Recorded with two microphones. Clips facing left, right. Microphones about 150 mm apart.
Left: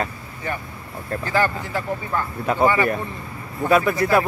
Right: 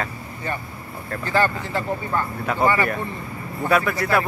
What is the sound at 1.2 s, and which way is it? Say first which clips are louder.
Speech: right 1 dB; 10° left (ahead or behind).